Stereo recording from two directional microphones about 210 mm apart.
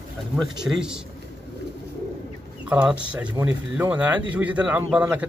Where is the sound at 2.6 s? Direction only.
5° right (ahead or behind).